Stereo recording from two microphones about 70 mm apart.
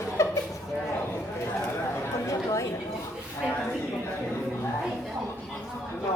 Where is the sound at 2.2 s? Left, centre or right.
Left.